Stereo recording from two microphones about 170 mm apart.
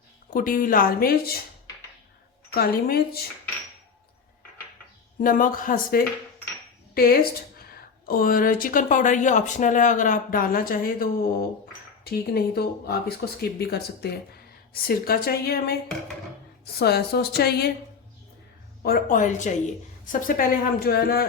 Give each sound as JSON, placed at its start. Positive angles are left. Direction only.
{"t": 0.3, "sound": "speech", "side_deg": 55}
{"t": 2.5, "sound": "speech", "side_deg": 65}
{"t": 5.2, "sound": "speech", "side_deg": 55}
{"t": 18.8, "sound": "a woman's voice", "side_deg": 60}